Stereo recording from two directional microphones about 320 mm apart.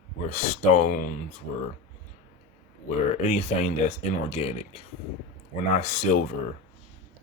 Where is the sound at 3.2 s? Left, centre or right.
Left.